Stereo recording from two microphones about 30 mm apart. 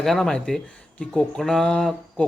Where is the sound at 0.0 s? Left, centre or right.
Centre.